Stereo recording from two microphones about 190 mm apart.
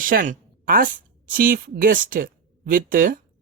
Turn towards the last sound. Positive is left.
turn(degrees=-45)  # may be behind; listen again after turning